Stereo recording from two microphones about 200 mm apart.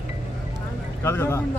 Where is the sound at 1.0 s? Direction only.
10° left (ahead or behind).